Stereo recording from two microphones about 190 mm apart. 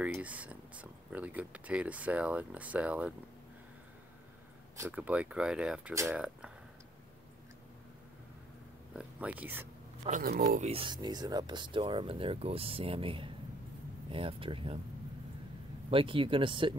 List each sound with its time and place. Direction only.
0.0 s speech: 5° right (ahead or behind)
4.7 s speech: 10° right (ahead or behind)
8.9 s speech: 5° right (ahead or behind)
10.0 s speech: 45° right (ahead or behind); by 14.8 s 25° right (ahead or behind)
15.9 s speech: 30° right (ahead or behind)